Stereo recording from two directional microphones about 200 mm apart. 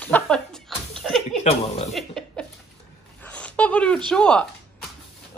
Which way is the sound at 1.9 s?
Centre (ahead or behind).